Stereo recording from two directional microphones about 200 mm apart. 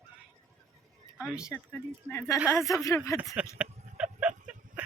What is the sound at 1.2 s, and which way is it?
Speech, 5° right (ahead or behind).